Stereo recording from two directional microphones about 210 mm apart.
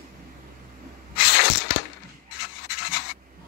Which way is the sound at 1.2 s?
55° left (ahead or behind).